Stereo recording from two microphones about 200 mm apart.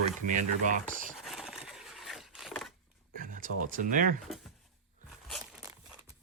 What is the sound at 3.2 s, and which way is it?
Speech, 40° right (ahead or behind).